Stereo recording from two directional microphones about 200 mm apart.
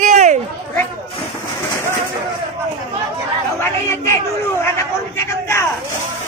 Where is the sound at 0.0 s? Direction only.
35° right (ahead or behind).